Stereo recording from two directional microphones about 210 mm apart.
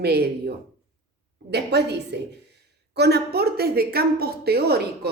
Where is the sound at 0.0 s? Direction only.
50° right (ahead or behind).